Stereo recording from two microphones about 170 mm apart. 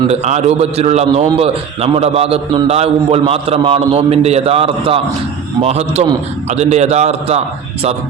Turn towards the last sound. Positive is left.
turn(degrees=-40)  # may be behind; listen again after turning